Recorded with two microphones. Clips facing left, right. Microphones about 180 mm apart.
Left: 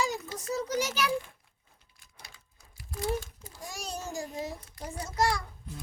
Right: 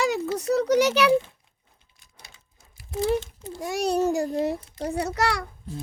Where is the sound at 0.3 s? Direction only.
70° right (ahead or behind).